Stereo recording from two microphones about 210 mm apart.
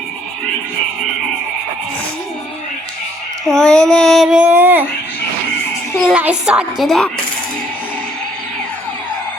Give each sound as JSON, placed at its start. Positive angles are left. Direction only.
{"t": 3.4, "sound": "child singing", "side_deg": 0}
{"t": 6.1, "sound": "child singing", "side_deg": -5}